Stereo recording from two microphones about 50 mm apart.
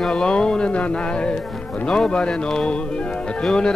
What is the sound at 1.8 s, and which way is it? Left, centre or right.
Music, centre.